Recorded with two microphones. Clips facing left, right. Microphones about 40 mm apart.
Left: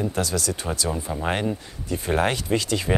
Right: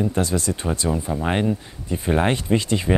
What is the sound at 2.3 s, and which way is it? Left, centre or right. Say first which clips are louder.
Speech: right 3 dB; right.